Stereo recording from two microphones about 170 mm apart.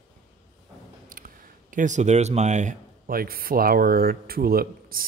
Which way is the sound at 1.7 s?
50° right (ahead or behind).